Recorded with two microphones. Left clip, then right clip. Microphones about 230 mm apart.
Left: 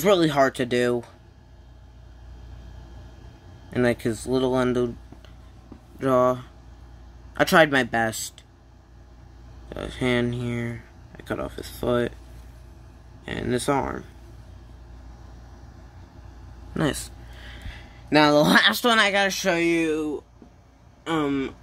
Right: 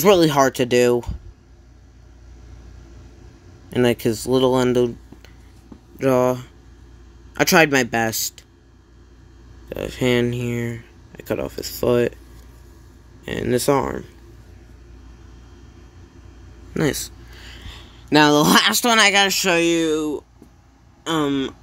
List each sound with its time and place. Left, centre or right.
0.0 s speech: centre
3.7 s speech: centre
9.7 s speech: centre
13.2 s speech: centre
16.7 s speech: centre